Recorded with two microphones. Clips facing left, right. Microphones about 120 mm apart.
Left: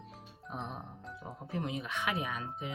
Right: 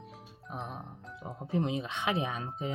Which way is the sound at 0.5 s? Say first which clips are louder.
Right 1 dB; centre (ahead or behind).